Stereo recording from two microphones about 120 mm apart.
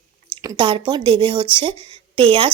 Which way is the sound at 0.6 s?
45° right (ahead or behind).